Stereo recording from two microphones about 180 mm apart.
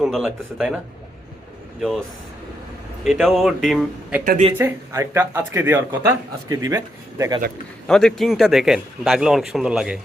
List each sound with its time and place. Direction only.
0.0 s a man's voice: 5° right (ahead or behind)
1.8 s a man's voice: centre (ahead or behind)
4.2 s speech: 40° right (ahead or behind)
4.5 s speech: 15° right (ahead or behind)
7.9 s a man's voice: 5° left (ahead or behind)